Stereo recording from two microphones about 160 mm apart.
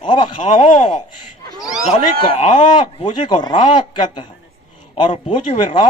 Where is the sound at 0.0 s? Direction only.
30° left (ahead or behind).